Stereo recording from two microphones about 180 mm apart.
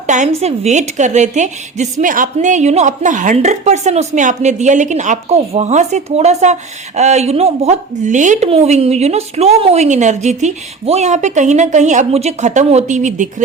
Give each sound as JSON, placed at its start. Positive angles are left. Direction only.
{"t": 0.1, "sound": "a woman's voice", "side_deg": -40}